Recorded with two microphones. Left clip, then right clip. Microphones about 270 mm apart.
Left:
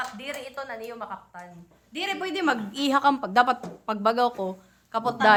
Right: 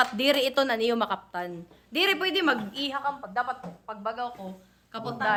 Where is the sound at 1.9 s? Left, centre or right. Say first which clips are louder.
Right 4 dB; centre.